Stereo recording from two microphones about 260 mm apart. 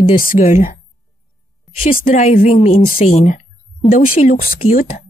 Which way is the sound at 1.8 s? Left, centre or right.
Left.